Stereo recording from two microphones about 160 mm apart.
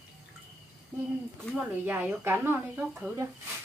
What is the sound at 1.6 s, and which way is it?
Speech, 10° right (ahead or behind).